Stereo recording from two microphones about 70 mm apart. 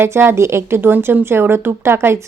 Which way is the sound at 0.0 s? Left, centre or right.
Right.